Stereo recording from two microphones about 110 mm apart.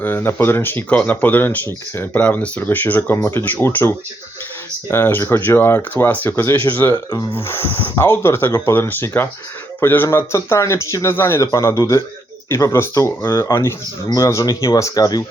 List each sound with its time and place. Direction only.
0.0 s a man's voice: 20° left (ahead or behind)